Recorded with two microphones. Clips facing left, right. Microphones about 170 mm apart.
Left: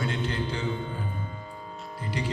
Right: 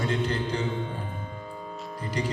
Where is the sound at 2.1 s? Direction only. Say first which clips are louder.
Right 2 dB; 35° right (ahead or behind).